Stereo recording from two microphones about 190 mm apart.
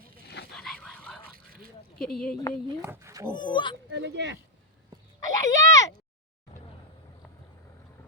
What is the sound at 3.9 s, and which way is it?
Speech, 70° right (ahead or behind).